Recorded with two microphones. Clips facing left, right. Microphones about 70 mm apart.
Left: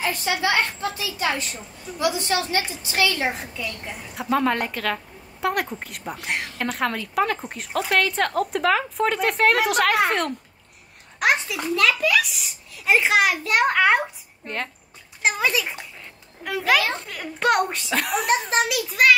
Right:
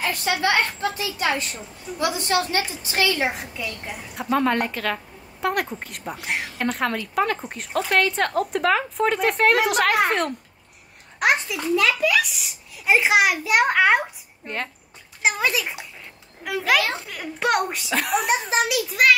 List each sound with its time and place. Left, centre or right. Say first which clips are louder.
0.0 s a woman's voice: right 1 dB; right
3.8 s a woman's voice: even; centre